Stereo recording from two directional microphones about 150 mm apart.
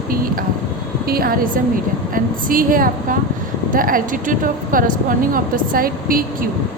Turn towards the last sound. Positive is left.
turn(degrees=-70)  # may be behind; listen again after turning